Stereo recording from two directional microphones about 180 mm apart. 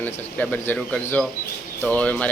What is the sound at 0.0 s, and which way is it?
A man's voice, 10° left (ahead or behind).